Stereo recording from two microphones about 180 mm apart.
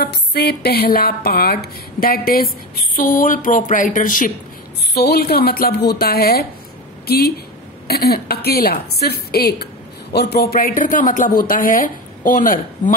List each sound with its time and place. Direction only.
0.0 s speech: 60° left (ahead or behind)
4.9 s speech: 60° left (ahead or behind)